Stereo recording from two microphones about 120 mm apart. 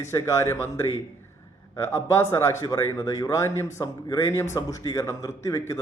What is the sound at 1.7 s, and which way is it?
A man's voice, 25° left (ahead or behind).